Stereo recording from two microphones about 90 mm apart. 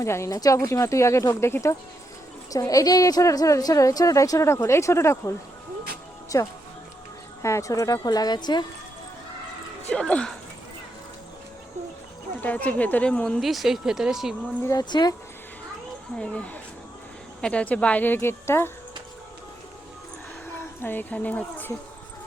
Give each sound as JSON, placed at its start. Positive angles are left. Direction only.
{"t": 0.0, "sound": "a woman's voice", "side_deg": 35}
{"t": 2.5, "sound": "a woman's voice", "side_deg": 40}
{"t": 6.3, "sound": "a woman's voice", "side_deg": 40}
{"t": 9.9, "sound": "speech", "side_deg": 10}
{"t": 12.4, "sound": "speech", "side_deg": 20}
{"t": 13.4, "sound": "speech", "side_deg": 0}
{"t": 14.8, "sound": "speech", "side_deg": 50}
{"t": 16.1, "sound": "a woman's voice", "side_deg": 10}
{"t": 20.6, "sound": "speech", "side_deg": 25}